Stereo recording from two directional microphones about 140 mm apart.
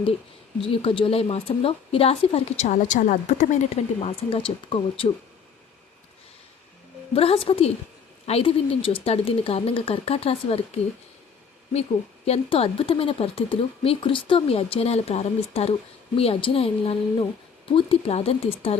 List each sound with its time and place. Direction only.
0.6 s speech: 40° left (ahead or behind)
4.3 s speech: 40° left (ahead or behind)
7.1 s speech: 45° left (ahead or behind)